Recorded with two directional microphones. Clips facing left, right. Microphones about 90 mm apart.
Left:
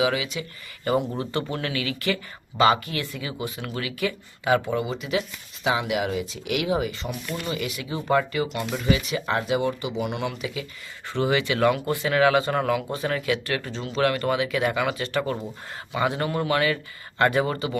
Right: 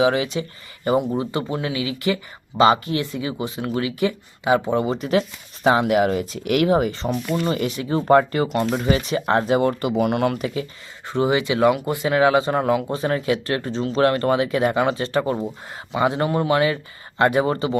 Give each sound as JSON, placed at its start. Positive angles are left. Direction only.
{"t": 0.0, "sound": "speech", "side_deg": -35}
{"t": 0.9, "sound": "speech", "side_deg": -20}
{"t": 4.8, "sound": "speech", "side_deg": -40}
{"t": 11.1, "sound": "speech", "side_deg": -20}
{"t": 15.2, "sound": "speech", "side_deg": -20}